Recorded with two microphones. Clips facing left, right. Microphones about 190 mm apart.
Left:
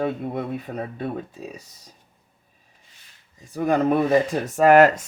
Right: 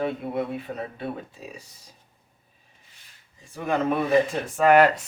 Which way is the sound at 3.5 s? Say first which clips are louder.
Left 5 dB; 40° left (ahead or behind).